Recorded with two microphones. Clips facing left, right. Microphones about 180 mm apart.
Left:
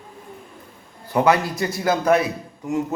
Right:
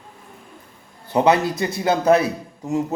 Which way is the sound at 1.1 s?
20° right (ahead or behind).